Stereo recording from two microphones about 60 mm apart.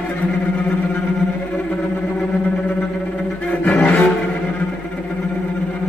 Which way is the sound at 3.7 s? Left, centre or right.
Left.